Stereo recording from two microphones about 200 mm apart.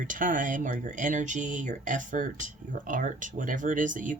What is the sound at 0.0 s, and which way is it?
Speech, 40° right (ahead or behind).